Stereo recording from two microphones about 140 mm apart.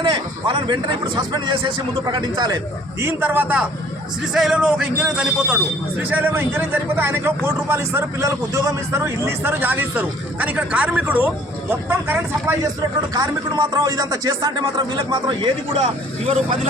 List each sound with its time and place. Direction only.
0.0 s a man's voice: 40° right (ahead or behind)
3.0 s a man's voice: 15° right (ahead or behind)
13.1 s a man's voice: 25° right (ahead or behind); by 16.6 s 45° right (ahead or behind)